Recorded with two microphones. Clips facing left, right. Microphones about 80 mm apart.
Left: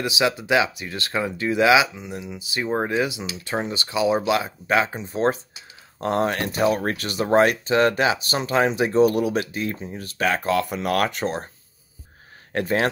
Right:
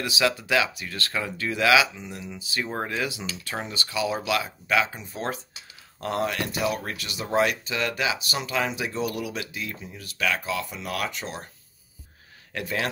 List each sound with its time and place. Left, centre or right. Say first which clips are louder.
0.2 s speech: left 3 dB; left
12.5 s speech: left 7 dB; left